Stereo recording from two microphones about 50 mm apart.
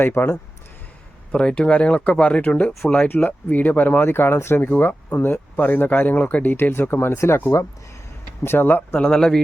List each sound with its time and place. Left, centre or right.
0.0 s speech: left
1.3 s speech: left
2.8 s a man's voice: centre
3.2 s speech: left
6.6 s speech: left
7.1 s speech: left
8.4 s speech: left
9.0 s a man's voice: centre